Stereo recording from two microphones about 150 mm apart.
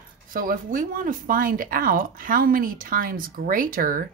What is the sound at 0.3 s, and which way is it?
Speech, 65° right (ahead or behind).